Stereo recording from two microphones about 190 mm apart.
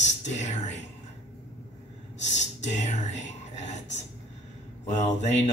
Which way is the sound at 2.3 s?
40° left (ahead or behind).